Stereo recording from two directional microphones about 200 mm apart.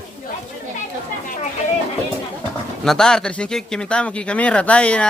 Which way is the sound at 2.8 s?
5° left (ahead or behind).